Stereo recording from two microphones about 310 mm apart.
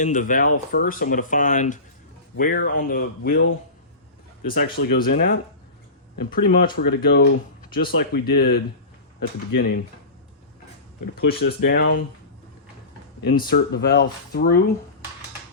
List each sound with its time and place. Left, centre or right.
0.0 s speech: left
4.4 s speech: left
11.1 s speech: left
13.2 s speech: left